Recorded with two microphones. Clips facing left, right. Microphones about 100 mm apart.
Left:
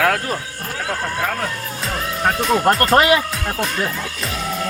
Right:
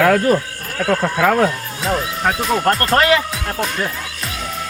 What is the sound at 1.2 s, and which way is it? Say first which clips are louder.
Speech: right 11 dB; 90° right.